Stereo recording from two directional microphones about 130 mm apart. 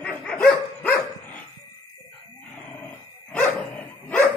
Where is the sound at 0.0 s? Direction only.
10° left (ahead or behind).